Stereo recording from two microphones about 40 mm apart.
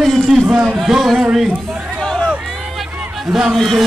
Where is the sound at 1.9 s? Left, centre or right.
Centre.